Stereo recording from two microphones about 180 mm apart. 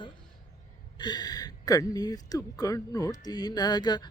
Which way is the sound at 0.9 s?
25° left (ahead or behind).